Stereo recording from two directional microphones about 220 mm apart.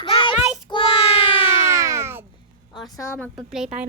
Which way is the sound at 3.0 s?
10° left (ahead or behind).